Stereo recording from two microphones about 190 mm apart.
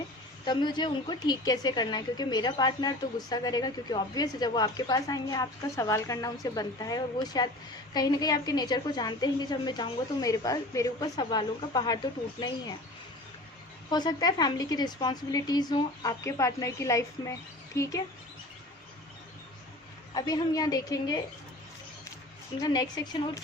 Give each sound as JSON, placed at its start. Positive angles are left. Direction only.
{"t": 0.4, "sound": "a woman's voice", "side_deg": 25}
{"t": 13.9, "sound": "a woman's voice", "side_deg": 20}
{"t": 20.1, "sound": "a woman's voice", "side_deg": 20}
{"t": 22.6, "sound": "a woman's voice", "side_deg": 20}